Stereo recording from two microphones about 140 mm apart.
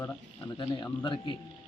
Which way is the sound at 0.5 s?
35° left (ahead or behind).